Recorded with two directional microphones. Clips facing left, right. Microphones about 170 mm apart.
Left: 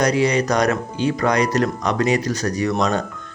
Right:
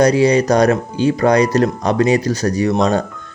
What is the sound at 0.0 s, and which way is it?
Speech, 30° right (ahead or behind).